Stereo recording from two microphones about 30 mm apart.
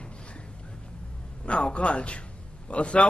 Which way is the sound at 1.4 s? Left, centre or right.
Left.